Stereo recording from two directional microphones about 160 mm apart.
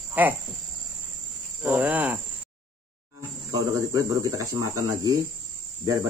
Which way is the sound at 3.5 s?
25° right (ahead or behind).